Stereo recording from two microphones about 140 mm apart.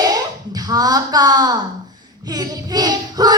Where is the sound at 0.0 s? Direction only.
30° right (ahead or behind).